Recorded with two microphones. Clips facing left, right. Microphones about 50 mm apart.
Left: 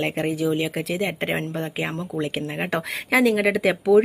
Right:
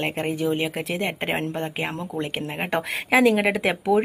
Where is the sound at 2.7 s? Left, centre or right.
Centre.